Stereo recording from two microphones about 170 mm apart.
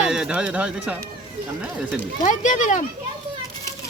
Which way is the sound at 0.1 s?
5° right (ahead or behind).